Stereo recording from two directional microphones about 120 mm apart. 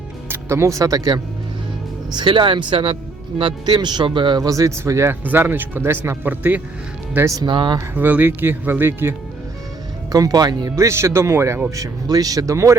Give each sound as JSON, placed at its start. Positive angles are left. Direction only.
{"t": 0.3, "sound": "speech", "side_deg": -20}
{"t": 7.3, "sound": "speech", "side_deg": -40}
{"t": 7.9, "sound": "speech", "side_deg": -15}
{"t": 10.1, "sound": "speech", "side_deg": -30}